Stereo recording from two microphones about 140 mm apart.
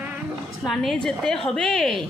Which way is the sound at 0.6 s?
Centre (ahead or behind).